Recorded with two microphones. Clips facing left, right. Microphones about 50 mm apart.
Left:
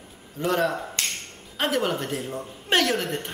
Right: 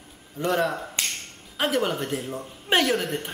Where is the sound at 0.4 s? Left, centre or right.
Centre.